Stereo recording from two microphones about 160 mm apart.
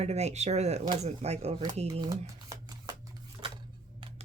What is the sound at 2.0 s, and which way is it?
Shuffling cards, 25° right (ahead or behind).